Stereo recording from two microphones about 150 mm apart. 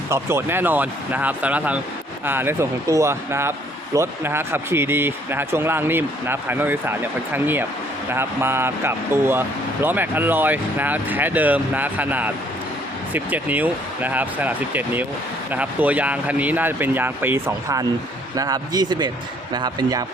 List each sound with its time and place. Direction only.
0.1 s speech: 15° right (ahead or behind)